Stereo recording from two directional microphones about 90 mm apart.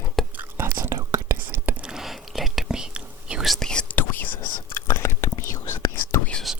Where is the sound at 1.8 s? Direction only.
5° right (ahead or behind).